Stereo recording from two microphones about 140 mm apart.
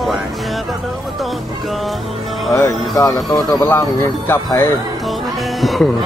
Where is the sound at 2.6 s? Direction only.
25° left (ahead or behind).